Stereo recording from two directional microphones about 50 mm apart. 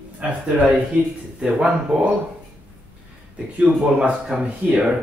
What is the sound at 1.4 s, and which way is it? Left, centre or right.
Speech, centre.